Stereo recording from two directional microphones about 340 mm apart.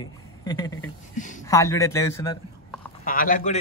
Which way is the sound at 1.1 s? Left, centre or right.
Left.